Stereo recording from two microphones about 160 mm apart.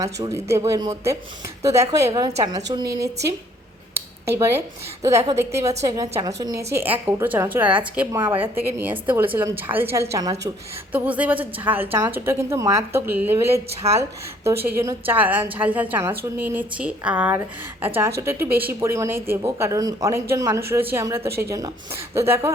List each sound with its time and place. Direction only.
0.0 s a woman's voice: 20° right (ahead or behind)
4.3 s a woman's voice: 15° right (ahead or behind)
10.9 s speech: 10° right (ahead or behind)